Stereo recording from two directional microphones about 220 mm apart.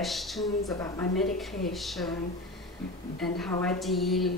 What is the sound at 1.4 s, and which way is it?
Speech, centre (ahead or behind).